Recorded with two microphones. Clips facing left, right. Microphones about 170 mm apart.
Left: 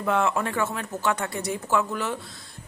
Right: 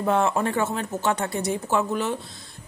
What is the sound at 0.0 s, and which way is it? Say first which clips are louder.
A woman's voice: right 2 dB; 30° right (ahead or behind).